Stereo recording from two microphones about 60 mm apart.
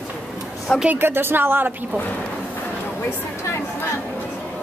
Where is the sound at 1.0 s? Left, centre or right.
Right.